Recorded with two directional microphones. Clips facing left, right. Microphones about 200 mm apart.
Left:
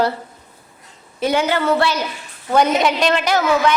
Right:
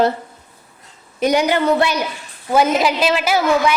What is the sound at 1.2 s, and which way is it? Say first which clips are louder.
A woman's voice: right 2 dB; 15° right (ahead or behind).